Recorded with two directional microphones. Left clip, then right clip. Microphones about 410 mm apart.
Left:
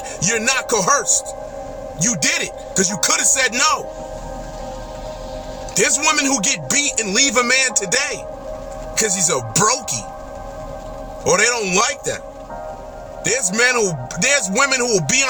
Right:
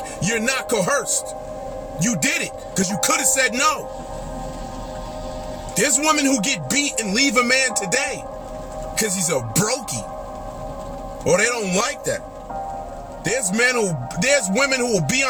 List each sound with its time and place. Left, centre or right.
0.2 s speech: centre
5.7 s speech: centre
11.2 s speech: centre
13.2 s speech: centre